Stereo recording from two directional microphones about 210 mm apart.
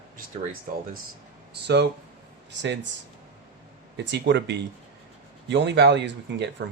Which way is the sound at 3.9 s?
55° right (ahead or behind).